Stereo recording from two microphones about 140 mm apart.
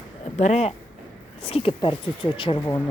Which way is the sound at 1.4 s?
40° left (ahead or behind).